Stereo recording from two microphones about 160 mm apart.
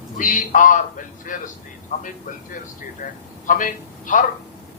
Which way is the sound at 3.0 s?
65° left (ahead or behind).